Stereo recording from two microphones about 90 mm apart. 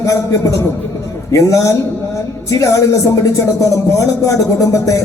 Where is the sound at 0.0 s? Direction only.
35° left (ahead or behind).